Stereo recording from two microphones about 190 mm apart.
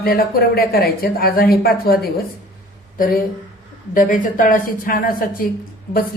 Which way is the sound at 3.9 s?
45° left (ahead or behind).